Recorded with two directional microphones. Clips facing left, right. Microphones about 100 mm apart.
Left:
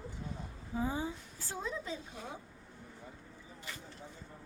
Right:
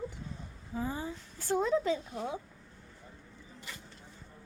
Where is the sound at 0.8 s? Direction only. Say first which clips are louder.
Even; 15° left (ahead or behind).